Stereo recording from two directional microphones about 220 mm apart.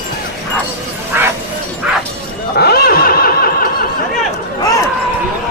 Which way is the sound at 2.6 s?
45° left (ahead or behind).